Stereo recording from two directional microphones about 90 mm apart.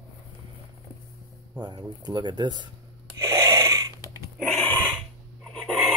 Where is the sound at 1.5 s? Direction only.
50° right (ahead or behind).